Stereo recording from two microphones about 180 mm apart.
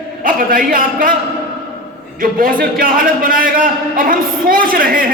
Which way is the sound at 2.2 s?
50° right (ahead or behind).